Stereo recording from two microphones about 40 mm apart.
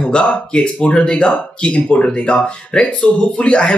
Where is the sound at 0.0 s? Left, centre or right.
Left.